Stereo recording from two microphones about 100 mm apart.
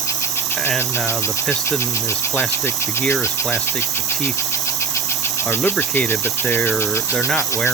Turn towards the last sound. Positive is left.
turn(degrees=20)  # may be behind; listen again after turning